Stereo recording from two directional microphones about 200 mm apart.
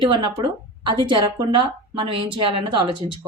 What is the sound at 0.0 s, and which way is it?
A woman's voice, 25° right (ahead or behind).